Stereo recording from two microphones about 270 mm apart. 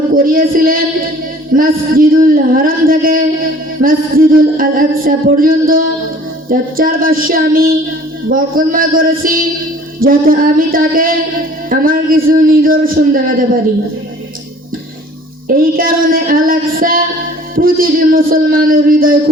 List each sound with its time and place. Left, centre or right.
0.1 s speech: right
15.4 s speech: right